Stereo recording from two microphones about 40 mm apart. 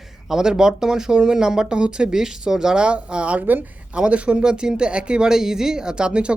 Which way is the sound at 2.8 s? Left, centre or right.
Right.